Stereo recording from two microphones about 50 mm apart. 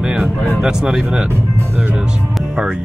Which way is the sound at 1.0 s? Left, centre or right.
Right.